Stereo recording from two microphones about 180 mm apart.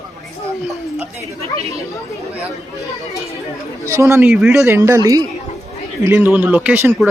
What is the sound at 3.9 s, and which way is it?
Speech, 15° right (ahead or behind).